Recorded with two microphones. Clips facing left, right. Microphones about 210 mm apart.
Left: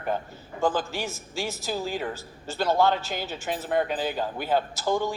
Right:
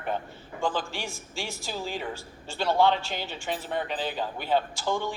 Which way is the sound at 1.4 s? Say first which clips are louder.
Left 4 dB; 40° left (ahead or behind).